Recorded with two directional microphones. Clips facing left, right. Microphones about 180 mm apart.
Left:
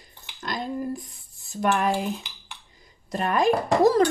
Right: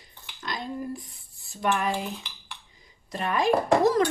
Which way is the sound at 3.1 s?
45° left (ahead or behind).